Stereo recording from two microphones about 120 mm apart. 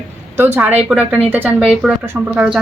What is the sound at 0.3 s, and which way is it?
A woman's voice, 15° right (ahead or behind).